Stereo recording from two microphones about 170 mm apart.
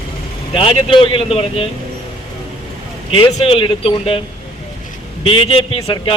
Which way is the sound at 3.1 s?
35° left (ahead or behind).